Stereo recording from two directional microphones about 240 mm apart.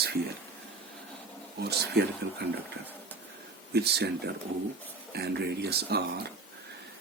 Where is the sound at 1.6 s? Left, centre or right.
Right.